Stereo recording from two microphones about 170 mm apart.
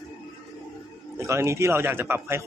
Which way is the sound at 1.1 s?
15° right (ahead or behind).